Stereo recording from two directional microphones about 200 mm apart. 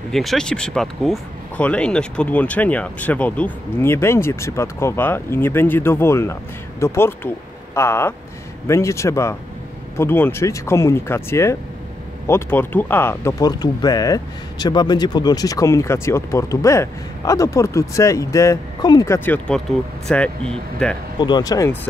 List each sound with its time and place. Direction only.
0.1 s speech: centre (ahead or behind)
21.2 s speech: 20° left (ahead or behind)